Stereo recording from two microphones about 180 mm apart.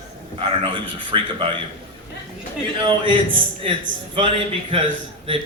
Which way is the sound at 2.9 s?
30° right (ahead or behind).